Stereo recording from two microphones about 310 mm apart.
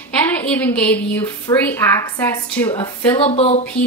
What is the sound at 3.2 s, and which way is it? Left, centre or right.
Speech, centre.